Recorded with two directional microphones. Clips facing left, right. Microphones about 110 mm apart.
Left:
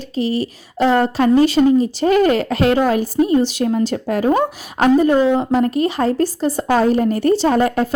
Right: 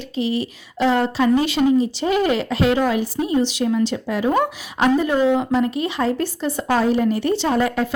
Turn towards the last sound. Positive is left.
turn(degrees=45)  # may be behind; listen again after turning